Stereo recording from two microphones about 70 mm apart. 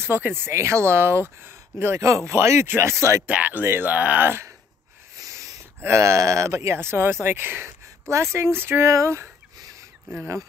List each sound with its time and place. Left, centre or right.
0.0 s speech: right
3.3 s speech: right
5.1 s a sound: right
5.8 s speech: right